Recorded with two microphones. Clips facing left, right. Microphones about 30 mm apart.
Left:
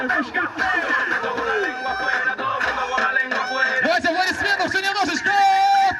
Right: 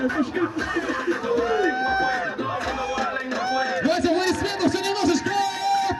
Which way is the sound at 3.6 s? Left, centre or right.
Centre.